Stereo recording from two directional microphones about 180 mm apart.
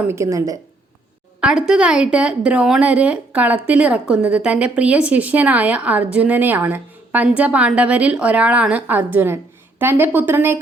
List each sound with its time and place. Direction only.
0.0 s a woman's voice: 15° right (ahead or behind)
1.4 s a woman's voice: 5° right (ahead or behind)